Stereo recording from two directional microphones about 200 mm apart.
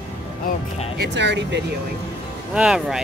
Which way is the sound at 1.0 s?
60° right (ahead or behind).